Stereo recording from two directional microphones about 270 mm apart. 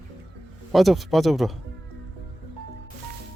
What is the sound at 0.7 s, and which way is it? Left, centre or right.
Speech, centre.